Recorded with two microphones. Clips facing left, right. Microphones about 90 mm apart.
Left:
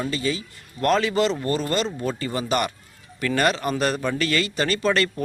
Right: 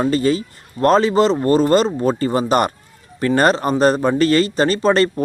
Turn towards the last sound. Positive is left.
turn(degrees=-35)  # may be behind; listen again after turning